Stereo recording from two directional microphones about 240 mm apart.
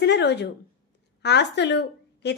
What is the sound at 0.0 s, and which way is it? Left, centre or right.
A woman's voice, left.